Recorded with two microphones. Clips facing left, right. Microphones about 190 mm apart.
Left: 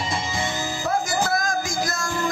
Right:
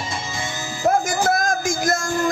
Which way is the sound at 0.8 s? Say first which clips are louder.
Right 6 dB; 50° right (ahead or behind).